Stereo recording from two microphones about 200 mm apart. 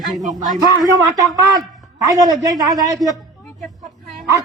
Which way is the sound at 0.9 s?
20° right (ahead or behind).